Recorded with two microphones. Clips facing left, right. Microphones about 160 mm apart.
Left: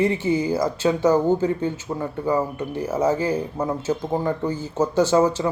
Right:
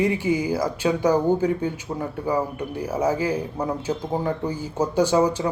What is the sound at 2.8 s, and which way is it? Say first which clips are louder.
Speech: left 2 dB; 10° right (ahead or behind).